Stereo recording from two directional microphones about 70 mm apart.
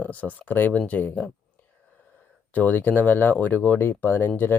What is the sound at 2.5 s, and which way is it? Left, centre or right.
Speech, left.